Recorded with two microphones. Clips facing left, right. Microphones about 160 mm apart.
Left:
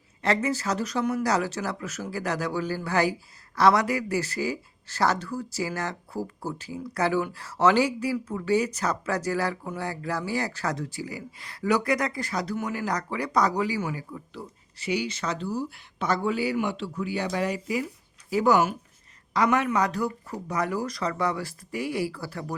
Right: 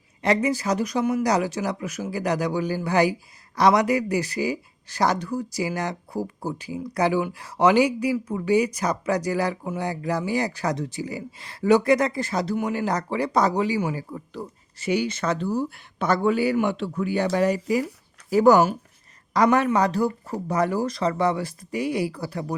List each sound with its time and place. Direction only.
0.2 s speech: 15° right (ahead or behind)